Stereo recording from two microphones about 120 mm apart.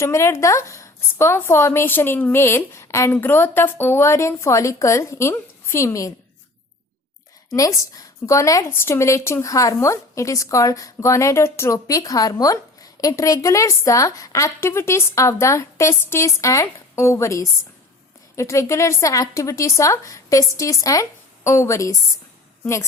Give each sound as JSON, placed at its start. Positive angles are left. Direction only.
{"t": 0.0, "sound": "a woman's voice", "side_deg": 25}
{"t": 7.5, "sound": "a woman's voice", "side_deg": 30}